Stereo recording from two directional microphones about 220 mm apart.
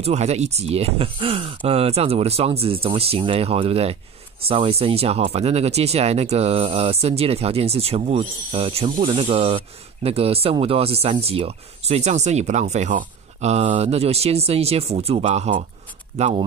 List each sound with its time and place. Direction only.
0.0 s speech: 30° right (ahead or behind)